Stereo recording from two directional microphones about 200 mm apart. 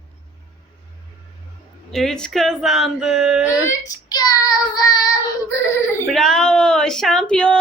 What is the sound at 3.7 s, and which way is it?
Child singing, 20° left (ahead or behind).